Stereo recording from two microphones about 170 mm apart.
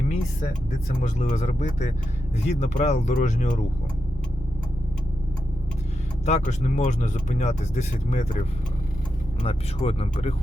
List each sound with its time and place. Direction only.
1.0 s speech: 40° left (ahead or behind)
6.2 s speech: 40° left (ahead or behind)
9.4 s speech: 35° left (ahead or behind)